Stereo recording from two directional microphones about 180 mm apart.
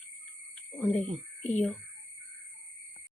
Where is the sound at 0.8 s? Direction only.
10° left (ahead or behind).